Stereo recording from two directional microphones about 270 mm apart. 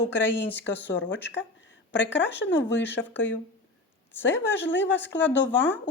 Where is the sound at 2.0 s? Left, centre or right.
Left.